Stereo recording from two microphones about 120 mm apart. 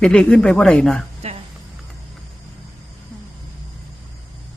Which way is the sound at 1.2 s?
60° right (ahead or behind).